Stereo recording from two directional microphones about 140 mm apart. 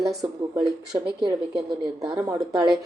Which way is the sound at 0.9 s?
25° right (ahead or behind).